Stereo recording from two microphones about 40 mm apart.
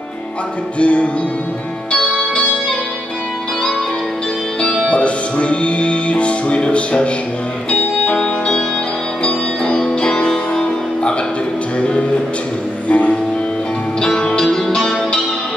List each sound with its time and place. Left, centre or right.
0.7 s music: left
4.8 s music: left
8.2 s music: left
9.8 s music: left
14.5 s music: centre